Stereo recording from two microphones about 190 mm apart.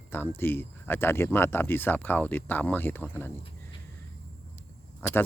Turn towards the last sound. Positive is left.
turn(degrees=10)  # may be behind; listen again after turning